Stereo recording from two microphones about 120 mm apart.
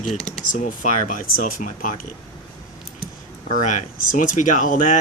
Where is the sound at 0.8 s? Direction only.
90° left.